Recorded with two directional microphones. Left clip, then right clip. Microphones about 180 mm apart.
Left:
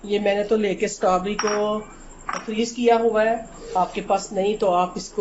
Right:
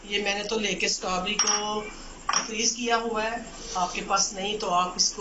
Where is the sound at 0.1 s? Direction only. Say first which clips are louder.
Left 7 dB; 50° left (ahead or behind).